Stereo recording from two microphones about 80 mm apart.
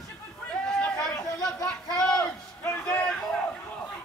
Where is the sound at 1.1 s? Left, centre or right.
Left.